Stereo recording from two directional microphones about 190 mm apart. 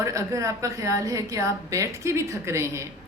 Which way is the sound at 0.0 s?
15° right (ahead or behind).